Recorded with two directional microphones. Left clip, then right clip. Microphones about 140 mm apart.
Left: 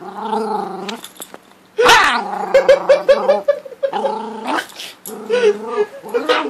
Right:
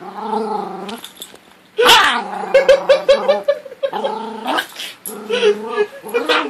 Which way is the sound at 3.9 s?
10° left (ahead or behind).